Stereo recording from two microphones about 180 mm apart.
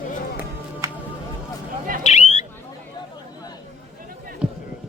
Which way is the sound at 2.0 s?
40° left (ahead or behind).